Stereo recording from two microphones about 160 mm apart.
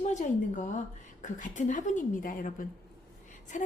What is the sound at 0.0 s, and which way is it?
A woman's voice, 50° left (ahead or behind).